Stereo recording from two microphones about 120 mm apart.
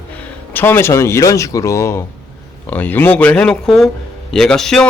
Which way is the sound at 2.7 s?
15° left (ahead or behind).